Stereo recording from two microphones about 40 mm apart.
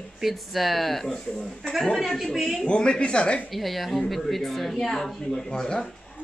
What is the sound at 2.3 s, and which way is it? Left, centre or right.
Speech, centre.